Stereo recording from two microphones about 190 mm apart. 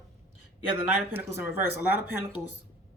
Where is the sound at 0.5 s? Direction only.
10° right (ahead or behind).